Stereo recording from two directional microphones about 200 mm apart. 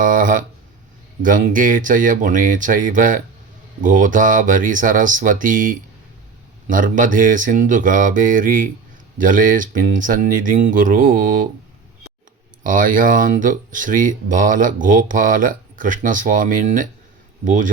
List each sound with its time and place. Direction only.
0.0 s a sound: 40° right (ahead or behind)
1.2 s speech: 40° right (ahead or behind)
12.6 s speech: 40° right (ahead or behind)